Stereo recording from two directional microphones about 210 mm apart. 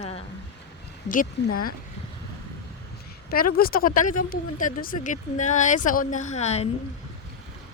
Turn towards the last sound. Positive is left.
turn(degrees=30)  # may be behind; listen again after turning